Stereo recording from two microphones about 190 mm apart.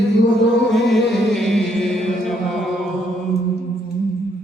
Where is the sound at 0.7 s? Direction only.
Centre (ahead or behind).